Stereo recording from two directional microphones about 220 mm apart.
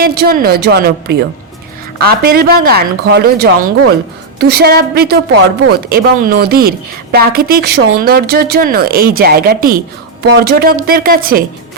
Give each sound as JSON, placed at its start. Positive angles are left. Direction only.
{"t": 0.0, "sound": "a woman's voice", "side_deg": -45}